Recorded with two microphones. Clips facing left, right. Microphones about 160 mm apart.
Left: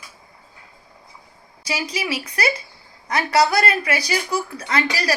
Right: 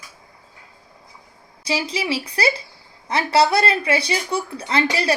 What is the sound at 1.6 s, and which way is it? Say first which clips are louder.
Speech: right 3 dB; 25° right (ahead or behind).